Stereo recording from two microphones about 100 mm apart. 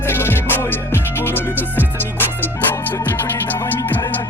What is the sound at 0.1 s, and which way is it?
Music, 20° left (ahead or behind).